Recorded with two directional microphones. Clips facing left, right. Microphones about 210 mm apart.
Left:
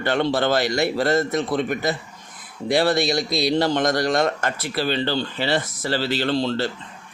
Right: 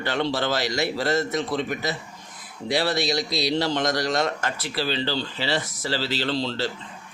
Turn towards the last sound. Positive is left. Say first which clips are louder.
# left 4 dB
turn(degrees=55)  # may be behind; listen again after turning